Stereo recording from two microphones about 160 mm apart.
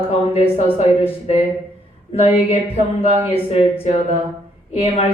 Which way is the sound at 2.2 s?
40° left (ahead or behind).